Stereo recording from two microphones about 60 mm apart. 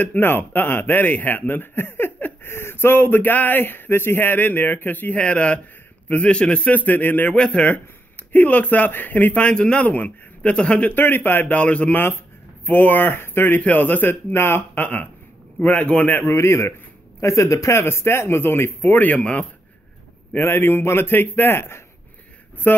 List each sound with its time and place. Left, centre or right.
0.0 s speech: left
7.3 s speech: centre
11.0 s speech: left
11.5 s speech: left
13.6 s speech: left
14.8 s speech: left
16.3 s a man's voice: left
17.8 s speech: left
20.4 s speech: left